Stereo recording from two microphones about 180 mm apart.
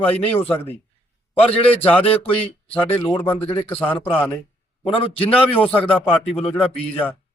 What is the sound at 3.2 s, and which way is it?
Speech, 10° left (ahead or behind).